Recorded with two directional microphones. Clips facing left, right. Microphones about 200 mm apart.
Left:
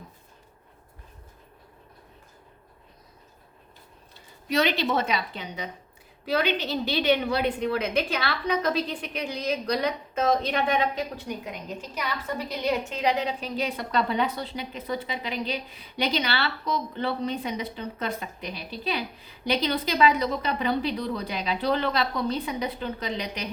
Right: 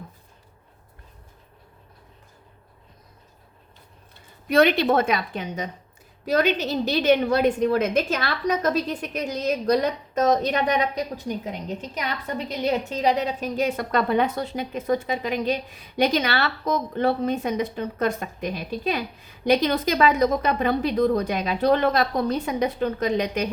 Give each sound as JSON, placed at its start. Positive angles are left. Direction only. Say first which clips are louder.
{"t": 4.4, "sound": "a woman's voice", "louder": "right 6 dB", "side_deg": -55}
{"t": 12.9, "sound": "a woman's voice", "louder": "right 3 dB", "side_deg": -40}